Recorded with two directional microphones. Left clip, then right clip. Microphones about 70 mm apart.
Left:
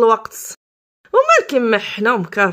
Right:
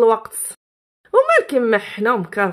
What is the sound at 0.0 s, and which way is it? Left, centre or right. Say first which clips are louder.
A woman's voice: left 1 dB; centre.